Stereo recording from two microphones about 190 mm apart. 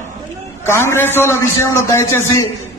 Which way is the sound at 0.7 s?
15° left (ahead or behind).